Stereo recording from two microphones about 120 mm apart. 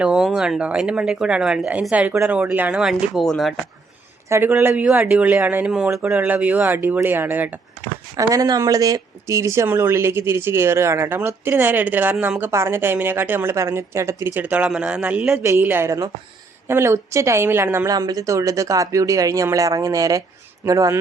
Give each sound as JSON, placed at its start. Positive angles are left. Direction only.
{"t": 0.0, "sound": "speech", "side_deg": -5}
{"t": 4.3, "sound": "speech", "side_deg": -20}
{"t": 8.1, "sound": "speech", "side_deg": -30}
{"t": 14.4, "sound": "speech", "side_deg": -10}
{"t": 15.3, "sound": "speech", "side_deg": -20}